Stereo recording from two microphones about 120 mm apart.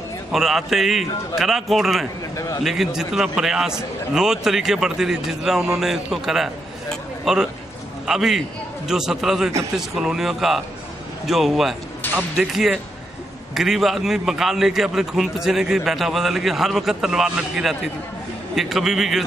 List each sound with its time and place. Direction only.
0.3 s a man's voice: centre (ahead or behind)
2.3 s a man's voice: 25° left (ahead or behind)
2.6 s a man's voice: 5° right (ahead or behind)